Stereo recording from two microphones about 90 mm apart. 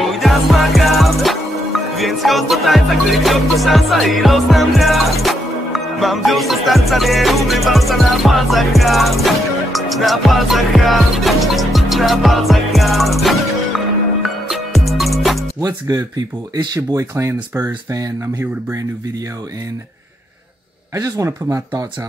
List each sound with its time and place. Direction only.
0.0 s music: centre (ahead or behind)
15.6 s speech: 40° right (ahead or behind)
17.1 s speech: 30° right (ahead or behind)
20.9 s speech: 35° right (ahead or behind)